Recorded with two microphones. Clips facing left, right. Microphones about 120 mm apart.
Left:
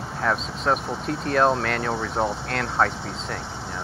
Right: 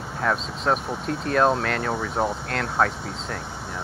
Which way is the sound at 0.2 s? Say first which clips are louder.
Even; centre (ahead or behind).